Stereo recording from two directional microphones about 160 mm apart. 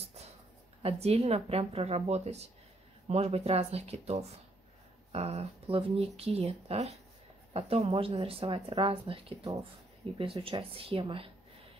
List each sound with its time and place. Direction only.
0.8 s speech: 40° right (ahead or behind)